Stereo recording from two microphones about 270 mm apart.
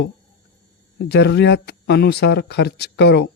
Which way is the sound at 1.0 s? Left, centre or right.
Left.